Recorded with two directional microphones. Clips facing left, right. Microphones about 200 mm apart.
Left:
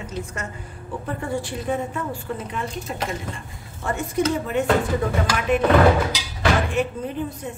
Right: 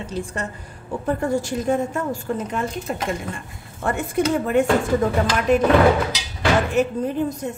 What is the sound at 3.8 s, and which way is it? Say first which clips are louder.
Speech: right 2 dB; 55° right (ahead or behind).